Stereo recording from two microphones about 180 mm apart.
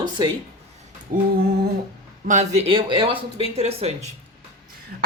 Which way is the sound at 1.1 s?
50° right (ahead or behind).